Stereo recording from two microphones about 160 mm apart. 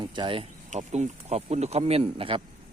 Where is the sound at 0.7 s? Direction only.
45° right (ahead or behind).